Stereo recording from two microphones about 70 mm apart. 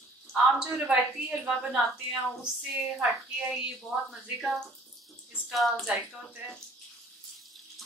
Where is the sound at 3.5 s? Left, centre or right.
Centre.